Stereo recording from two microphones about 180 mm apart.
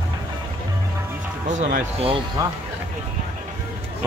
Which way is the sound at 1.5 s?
40° right (ahead or behind).